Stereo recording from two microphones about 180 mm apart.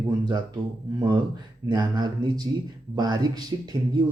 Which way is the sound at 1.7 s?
25° right (ahead or behind).